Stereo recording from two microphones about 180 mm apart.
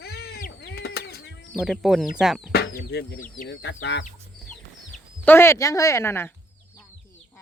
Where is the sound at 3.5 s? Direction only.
90° left.